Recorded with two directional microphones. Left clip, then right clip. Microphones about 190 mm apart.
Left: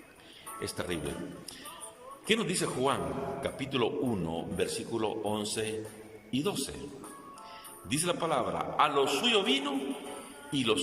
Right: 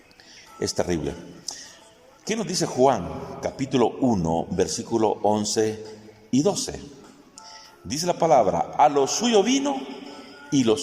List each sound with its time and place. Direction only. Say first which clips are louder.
0.8 s a man's voice: right 11 dB; 35° right (ahead or behind)
2.2 s a man's voice: right 3 dB; 35° right (ahead or behind)
7.9 s a man's voice: right 10 dB; 35° right (ahead or behind)